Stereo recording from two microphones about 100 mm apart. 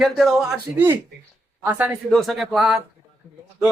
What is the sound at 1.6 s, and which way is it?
Speech, 20° right (ahead or behind).